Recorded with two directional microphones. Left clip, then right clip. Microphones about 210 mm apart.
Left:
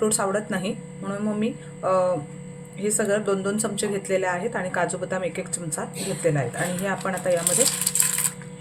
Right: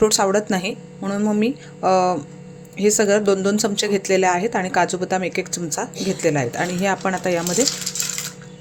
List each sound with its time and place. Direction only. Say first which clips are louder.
0.0 s speech: right 7 dB; 40° right (ahead or behind)